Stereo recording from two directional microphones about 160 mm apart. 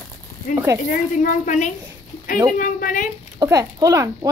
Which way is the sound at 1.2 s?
50° left (ahead or behind).